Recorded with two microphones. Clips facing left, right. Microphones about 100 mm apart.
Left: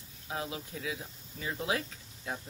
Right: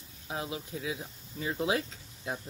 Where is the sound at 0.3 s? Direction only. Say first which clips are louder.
Right 1 dB; 25° right (ahead or behind).